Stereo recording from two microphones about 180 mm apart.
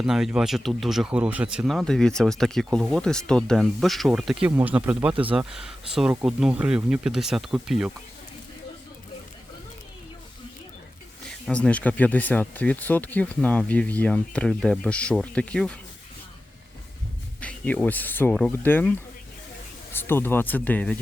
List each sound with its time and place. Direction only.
0.0 s speech: 5° right (ahead or behind)
11.3 s speech: 5° left (ahead or behind)
17.4 s speech: 10° left (ahead or behind)